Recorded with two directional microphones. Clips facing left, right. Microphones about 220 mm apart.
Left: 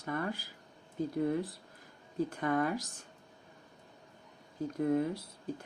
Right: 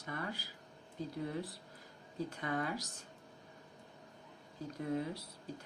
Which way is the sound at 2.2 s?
50° left (ahead or behind).